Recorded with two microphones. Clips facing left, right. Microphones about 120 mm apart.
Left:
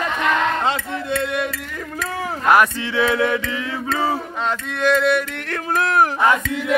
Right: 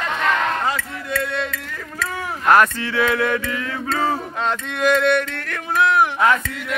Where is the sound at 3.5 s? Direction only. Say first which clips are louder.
Even; 20° left (ahead or behind).